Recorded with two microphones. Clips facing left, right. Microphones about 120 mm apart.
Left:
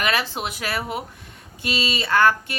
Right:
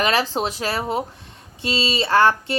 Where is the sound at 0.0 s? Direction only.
35° right (ahead or behind).